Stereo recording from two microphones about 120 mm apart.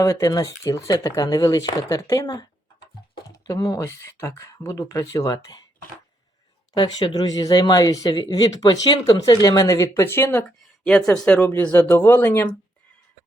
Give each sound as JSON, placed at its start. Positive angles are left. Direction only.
{"t": 0.0, "sound": "speech", "side_deg": 25}
{"t": 6.7, "sound": "speech", "side_deg": 35}
{"t": 10.8, "sound": "speech", "side_deg": 5}